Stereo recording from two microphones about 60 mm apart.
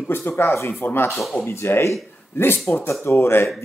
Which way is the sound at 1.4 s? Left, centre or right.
Left.